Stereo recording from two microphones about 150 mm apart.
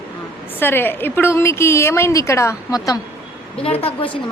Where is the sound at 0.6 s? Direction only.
15° left (ahead or behind).